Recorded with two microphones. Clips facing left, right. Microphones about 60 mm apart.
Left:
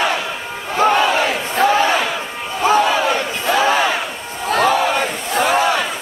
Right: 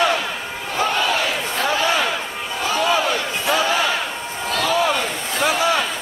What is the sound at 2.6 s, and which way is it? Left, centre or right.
Battle cry, left.